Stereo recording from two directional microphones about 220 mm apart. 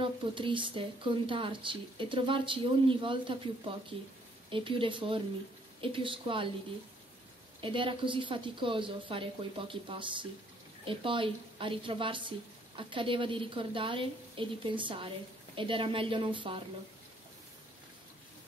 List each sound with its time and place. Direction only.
0.0 s a woman's voice: 20° right (ahead or behind)
7.6 s a woman's voice: 25° right (ahead or behind)